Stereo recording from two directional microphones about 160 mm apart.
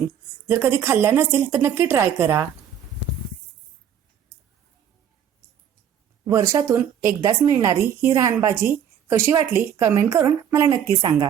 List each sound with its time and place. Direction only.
0.4 s speech: 15° right (ahead or behind)
6.2 s a woman's voice: 20° right (ahead or behind)